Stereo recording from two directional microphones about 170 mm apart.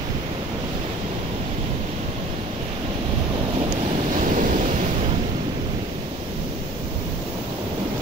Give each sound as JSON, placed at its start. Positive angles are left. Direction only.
{"t": 4.2, "sound": "waves", "side_deg": -50}